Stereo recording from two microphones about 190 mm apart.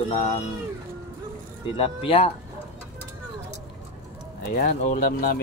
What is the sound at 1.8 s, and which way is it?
Speech, 30° left (ahead or behind).